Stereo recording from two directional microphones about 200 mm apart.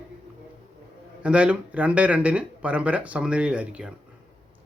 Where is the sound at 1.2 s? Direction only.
5° right (ahead or behind).